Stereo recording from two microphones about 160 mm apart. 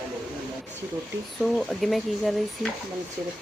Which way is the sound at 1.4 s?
Centre (ahead or behind).